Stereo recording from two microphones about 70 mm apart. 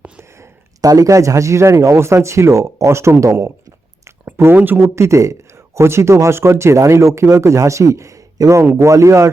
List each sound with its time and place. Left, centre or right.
0.8 s speech: right
4.4 s speech: right
4.8 s speech: right